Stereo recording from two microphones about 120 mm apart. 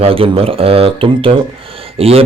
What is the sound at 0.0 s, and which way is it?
Speech, 50° right (ahead or behind).